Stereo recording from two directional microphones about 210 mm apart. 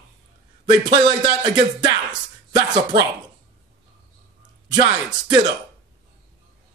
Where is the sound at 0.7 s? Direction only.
20° right (ahead or behind).